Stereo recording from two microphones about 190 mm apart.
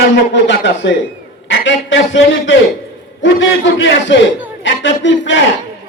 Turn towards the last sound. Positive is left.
turn(degrees=75)  # may be behind; listen again after turning